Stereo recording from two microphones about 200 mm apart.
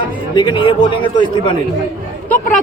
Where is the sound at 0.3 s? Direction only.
25° left (ahead or behind).